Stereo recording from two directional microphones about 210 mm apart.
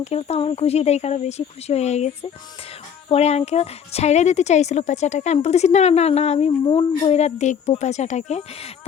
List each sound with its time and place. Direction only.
0.0 s a woman's voice: 30° left (ahead or behind)
3.1 s a woman's voice: 30° left (ahead or behind)